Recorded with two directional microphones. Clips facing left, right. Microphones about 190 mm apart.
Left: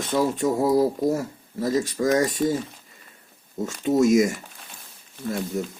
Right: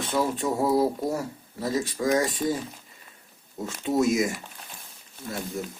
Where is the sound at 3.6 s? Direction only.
45° left (ahead or behind).